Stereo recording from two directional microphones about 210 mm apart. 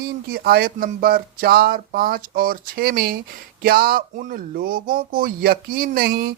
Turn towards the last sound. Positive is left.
turn(degrees=-45)  # may be behind; listen again after turning